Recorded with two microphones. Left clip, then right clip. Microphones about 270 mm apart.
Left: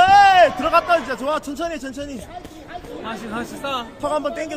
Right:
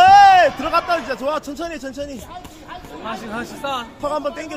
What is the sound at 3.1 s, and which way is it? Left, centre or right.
A man's voice, centre.